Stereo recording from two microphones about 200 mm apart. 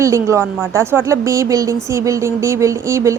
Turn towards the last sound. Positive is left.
turn(degrees=-15)  # may be behind; listen again after turning